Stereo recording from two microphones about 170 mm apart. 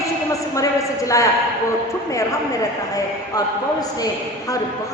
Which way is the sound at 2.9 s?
20° left (ahead or behind).